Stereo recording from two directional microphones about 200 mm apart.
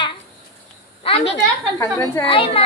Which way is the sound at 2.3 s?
25° left (ahead or behind).